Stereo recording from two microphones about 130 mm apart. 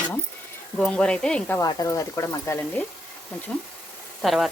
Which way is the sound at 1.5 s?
25° left (ahead or behind).